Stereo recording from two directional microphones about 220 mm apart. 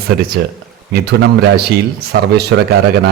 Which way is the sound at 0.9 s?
50° right (ahead or behind).